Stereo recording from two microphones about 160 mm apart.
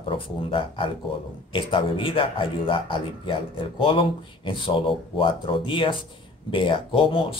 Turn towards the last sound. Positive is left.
turn(degrees=35)  # may be behind; listen again after turning